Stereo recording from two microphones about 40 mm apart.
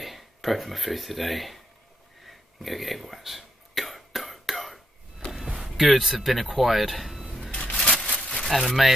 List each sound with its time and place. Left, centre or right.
0.0 s speech: centre
2.2 s throat clearing: centre
5.7 s speech: centre
7.5 s a sound: left
8.5 s speech: centre